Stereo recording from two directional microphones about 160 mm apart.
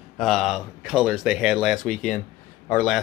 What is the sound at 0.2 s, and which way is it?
Speech, centre (ahead or behind).